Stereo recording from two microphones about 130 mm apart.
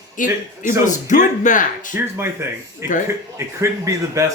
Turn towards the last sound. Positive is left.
turn(degrees=-20)  # may be behind; listen again after turning